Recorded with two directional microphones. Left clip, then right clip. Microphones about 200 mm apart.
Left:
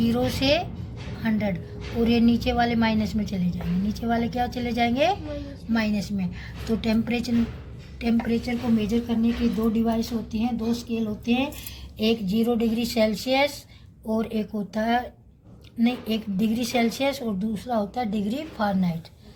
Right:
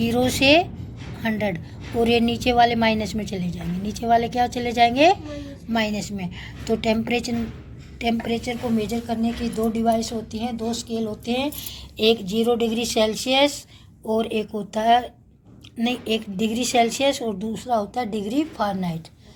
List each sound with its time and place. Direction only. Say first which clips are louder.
0.0 s a woman's voice: right 5 dB; 35° right (ahead or behind)
11.9 s a woman's voice: right 5 dB; 30° right (ahead or behind)